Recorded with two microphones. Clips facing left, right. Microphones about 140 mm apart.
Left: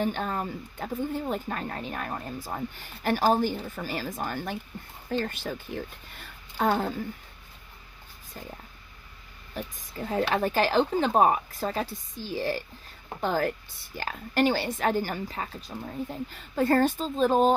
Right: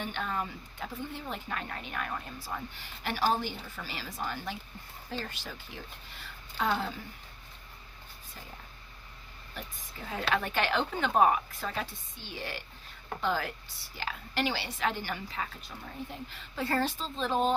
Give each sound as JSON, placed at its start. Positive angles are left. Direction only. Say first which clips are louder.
{"t": 0.0, "sound": "speech", "louder": "left 6 dB", "side_deg": 40}
{"t": 9.6, "sound": "a woman's voice", "louder": "left 9 dB", "side_deg": 40}